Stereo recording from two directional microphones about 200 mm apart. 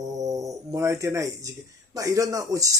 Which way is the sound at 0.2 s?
15° right (ahead or behind).